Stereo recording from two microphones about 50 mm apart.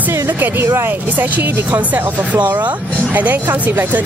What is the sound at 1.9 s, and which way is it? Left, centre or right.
Speech, right.